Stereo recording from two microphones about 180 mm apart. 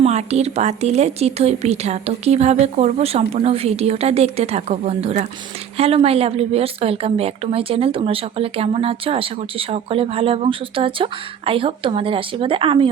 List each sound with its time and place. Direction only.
0.0 s a woman's voice: 35° right (ahead or behind)